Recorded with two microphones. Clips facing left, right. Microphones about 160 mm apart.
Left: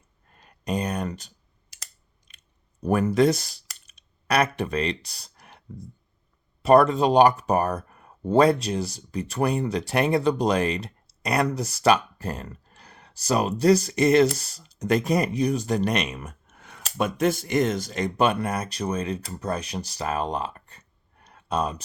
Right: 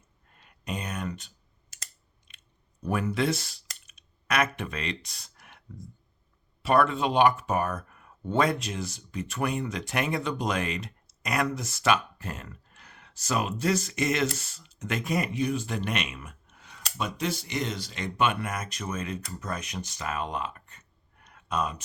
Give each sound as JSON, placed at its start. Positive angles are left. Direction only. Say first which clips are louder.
{"t": 0.3, "sound": "a sound", "louder": "left 8 dB", "side_deg": 40}
{"t": 2.3, "sound": "chewing", "louder": "even", "side_deg": 40}
{"t": 2.8, "sound": "clicking", "louder": "left 7 dB", "side_deg": 45}
{"t": 4.5, "sound": "speech", "louder": "left 8 dB", "side_deg": 35}